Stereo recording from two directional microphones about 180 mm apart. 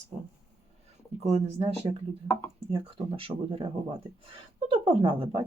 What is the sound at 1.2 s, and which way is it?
Speech, 35° right (ahead or behind).